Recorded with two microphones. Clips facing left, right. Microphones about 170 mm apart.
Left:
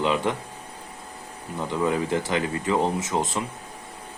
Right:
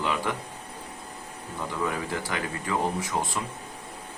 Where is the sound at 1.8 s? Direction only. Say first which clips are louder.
Left 7 dB; 20° left (ahead or behind).